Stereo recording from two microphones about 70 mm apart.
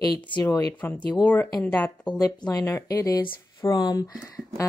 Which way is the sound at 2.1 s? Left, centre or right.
Left.